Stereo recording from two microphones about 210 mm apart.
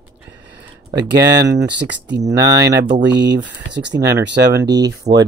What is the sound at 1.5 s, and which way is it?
Speech, 55° right (ahead or behind).